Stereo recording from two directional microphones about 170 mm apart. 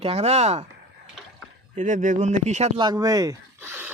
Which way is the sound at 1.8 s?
50° right (ahead or behind).